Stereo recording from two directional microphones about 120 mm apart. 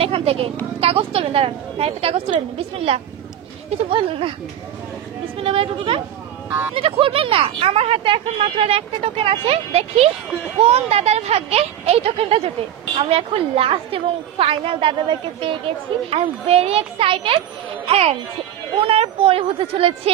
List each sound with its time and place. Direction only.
0.0 s speech: 55° right (ahead or behind)
5.4 s speech: 50° right (ahead or behind)